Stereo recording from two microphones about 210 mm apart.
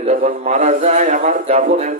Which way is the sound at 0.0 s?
30° right (ahead or behind).